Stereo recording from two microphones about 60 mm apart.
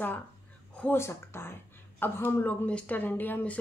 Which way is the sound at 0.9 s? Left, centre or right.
Left.